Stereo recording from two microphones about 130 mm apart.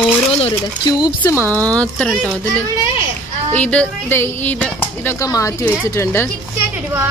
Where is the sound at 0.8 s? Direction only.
30° left (ahead or behind).